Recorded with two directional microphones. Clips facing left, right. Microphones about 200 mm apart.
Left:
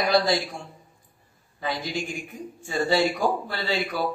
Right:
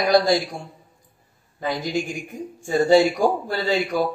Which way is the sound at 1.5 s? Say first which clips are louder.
Right 5 dB; 45° right (ahead or behind).